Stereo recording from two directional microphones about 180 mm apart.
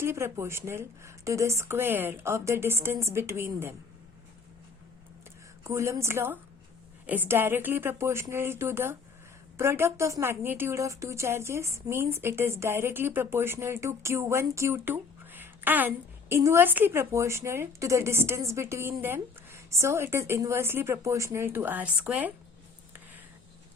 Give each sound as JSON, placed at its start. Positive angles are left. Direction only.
{"t": 0.0, "sound": "a woman's voice", "side_deg": -15}
{"t": 5.6, "sound": "a woman's voice", "side_deg": -15}